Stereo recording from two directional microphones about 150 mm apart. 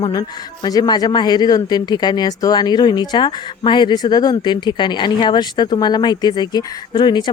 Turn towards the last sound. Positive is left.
turn(degrees=30)  # may be behind; listen again after turning